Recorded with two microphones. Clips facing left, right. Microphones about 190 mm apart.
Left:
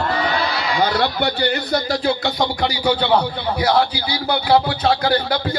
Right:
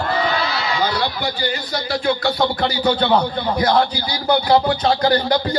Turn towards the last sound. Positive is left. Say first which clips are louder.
# right 2 dB
turn(degrees=5)  # may be behind; listen again after turning